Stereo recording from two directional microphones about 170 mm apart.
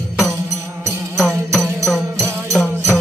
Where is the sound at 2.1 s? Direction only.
20° right (ahead or behind).